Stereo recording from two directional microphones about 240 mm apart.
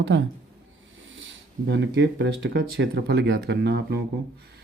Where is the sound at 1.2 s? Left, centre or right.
Right.